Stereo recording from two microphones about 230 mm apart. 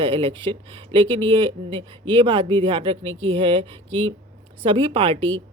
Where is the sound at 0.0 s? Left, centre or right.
Right.